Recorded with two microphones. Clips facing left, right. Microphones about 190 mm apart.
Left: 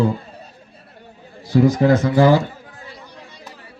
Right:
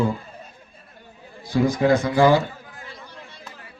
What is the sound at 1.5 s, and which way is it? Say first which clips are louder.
Speech: left 4 dB; 40° left (ahead or behind).